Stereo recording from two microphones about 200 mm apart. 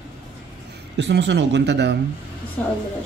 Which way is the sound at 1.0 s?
60° right (ahead or behind).